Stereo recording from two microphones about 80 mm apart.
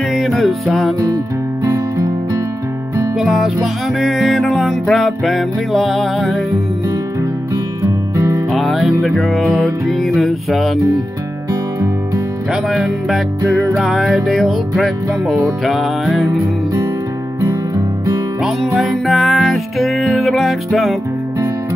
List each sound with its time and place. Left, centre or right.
0.1 s music: centre
1.0 s music: right
3.2 s music: centre
8.5 s music: centre
12.6 s music: centre
18.8 s music: centre